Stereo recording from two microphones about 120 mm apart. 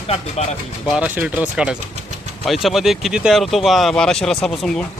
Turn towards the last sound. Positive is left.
turn(degrees=5)  # may be behind; listen again after turning